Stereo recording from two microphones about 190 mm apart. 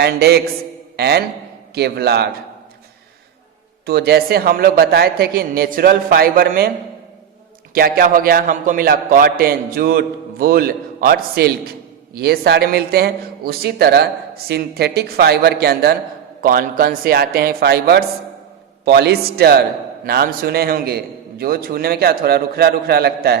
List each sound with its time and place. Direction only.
0.0 s a man's voice: 55° right (ahead or behind)
3.8 s a man's voice: 55° right (ahead or behind)
7.7 s a man's voice: 50° right (ahead or behind)